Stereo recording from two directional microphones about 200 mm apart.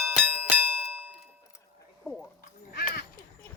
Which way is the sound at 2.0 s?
5° right (ahead or behind).